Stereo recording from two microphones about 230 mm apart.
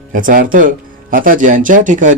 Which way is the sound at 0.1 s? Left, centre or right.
Right.